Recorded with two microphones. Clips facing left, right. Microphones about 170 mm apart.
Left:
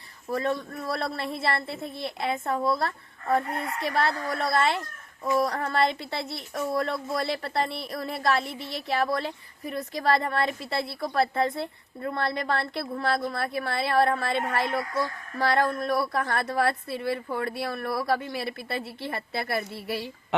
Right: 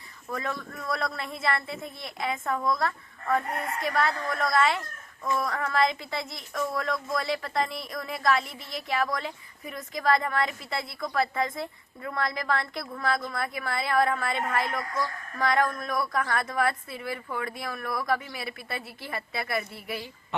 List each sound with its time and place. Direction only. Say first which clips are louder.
0.3 s speech: left 6 dB; 30° left (ahead or behind)